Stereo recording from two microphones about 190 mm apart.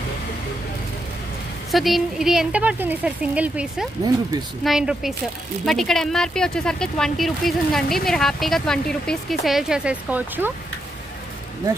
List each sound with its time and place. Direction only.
1.7 s speech: centre (ahead or behind)